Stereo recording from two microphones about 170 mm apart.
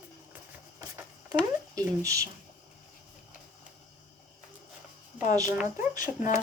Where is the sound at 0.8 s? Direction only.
15° right (ahead or behind).